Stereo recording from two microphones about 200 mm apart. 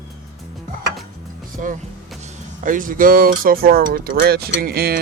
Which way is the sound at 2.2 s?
40° right (ahead or behind).